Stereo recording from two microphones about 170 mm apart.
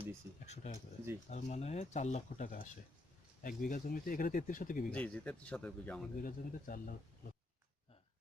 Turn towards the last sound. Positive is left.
turn(degrees=55)  # may be behind; listen again after turning